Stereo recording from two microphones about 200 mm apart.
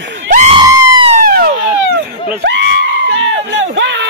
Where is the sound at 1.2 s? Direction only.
45° right (ahead or behind).